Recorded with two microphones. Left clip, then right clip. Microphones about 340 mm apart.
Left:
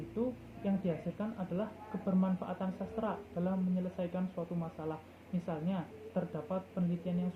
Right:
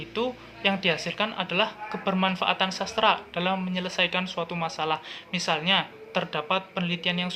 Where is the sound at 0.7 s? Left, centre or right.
Right.